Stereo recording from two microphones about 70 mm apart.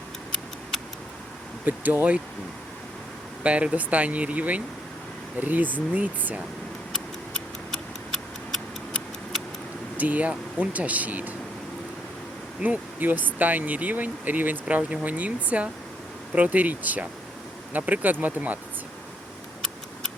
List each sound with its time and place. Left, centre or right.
1.6 s speech: right
3.4 s speech: centre
6.9 s tick-tock: centre
10.0 s speech: right
12.5 s speech: right